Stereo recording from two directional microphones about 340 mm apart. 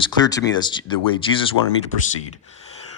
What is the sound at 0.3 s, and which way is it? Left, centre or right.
Speech, centre.